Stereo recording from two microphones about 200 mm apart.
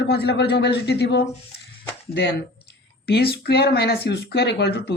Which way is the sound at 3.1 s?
50° left (ahead or behind).